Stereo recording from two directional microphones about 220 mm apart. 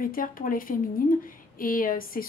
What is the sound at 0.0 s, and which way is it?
A woman's voice, 40° left (ahead or behind).